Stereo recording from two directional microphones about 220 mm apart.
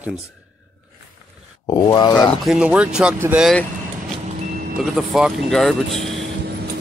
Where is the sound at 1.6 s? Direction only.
15° left (ahead or behind).